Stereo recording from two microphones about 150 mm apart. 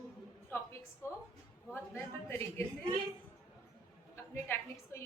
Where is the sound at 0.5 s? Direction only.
15° left (ahead or behind).